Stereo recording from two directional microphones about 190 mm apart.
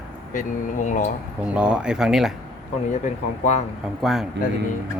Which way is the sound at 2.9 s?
40° left (ahead or behind).